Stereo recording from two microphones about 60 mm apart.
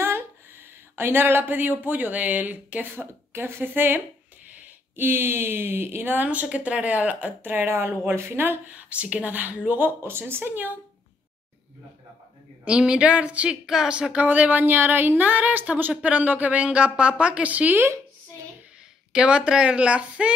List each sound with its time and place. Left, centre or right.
0.9 s speech: right
12.6 s speech: centre
17.7 s speech: right
19.1 s speech: centre